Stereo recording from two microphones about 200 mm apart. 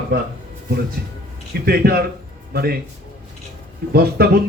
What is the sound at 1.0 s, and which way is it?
Speech, 50° right (ahead or behind).